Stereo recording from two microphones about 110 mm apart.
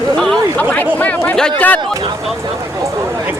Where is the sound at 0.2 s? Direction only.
10° left (ahead or behind).